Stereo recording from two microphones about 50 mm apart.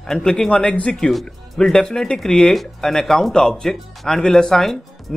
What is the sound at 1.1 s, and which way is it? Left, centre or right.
Speech, centre.